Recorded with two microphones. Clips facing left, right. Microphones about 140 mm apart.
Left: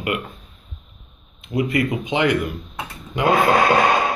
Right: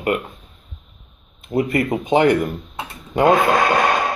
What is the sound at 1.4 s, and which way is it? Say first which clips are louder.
Speech: right 2 dB; 45° right (ahead or behind).